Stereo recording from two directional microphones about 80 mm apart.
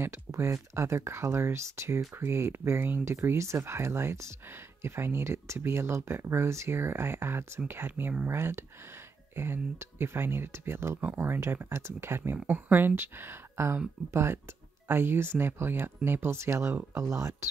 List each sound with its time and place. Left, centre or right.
0.0 s speech: right